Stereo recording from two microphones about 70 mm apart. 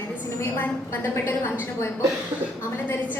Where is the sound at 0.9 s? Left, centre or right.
Left.